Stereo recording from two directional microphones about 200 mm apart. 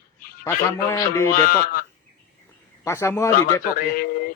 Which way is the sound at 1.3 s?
45° left (ahead or behind).